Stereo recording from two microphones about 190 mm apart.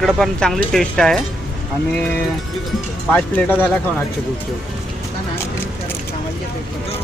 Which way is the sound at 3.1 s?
10° left (ahead or behind).